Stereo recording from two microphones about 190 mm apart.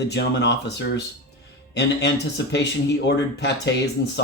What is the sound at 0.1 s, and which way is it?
Speech, 65° left (ahead or behind).